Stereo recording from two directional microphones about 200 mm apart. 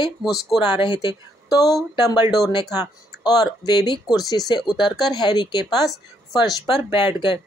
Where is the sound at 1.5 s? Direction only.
15° left (ahead or behind).